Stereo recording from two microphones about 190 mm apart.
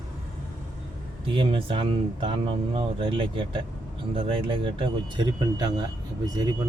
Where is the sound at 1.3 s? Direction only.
25° right (ahead or behind).